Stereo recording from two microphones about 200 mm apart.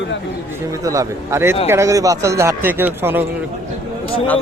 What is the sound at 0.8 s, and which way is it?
Speech, 15° right (ahead or behind).